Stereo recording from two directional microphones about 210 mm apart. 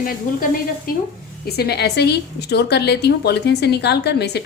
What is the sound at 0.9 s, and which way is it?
A woman's voice, 40° left (ahead or behind).